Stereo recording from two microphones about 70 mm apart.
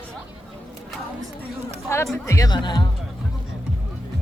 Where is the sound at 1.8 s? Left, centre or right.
Left.